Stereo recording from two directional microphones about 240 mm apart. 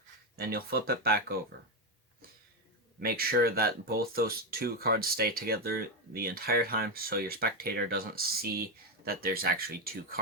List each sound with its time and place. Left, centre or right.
0.3 s speech: right
3.0 s speech: right